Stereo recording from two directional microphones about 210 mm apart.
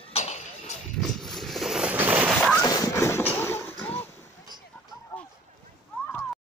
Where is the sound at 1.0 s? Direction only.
Centre (ahead or behind).